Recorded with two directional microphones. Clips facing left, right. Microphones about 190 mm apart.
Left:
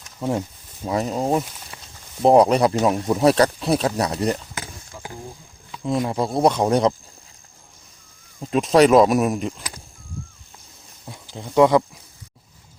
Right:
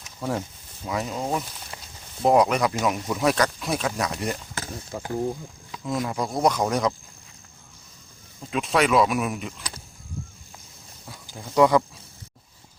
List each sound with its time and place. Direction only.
0.2 s speech: 20° left (ahead or behind)
0.9 s speech: 35° left (ahead or behind)
5.8 s speech: 25° left (ahead or behind)
8.4 s speech: 40° left (ahead or behind)
11.3 s speech: 20° left (ahead or behind)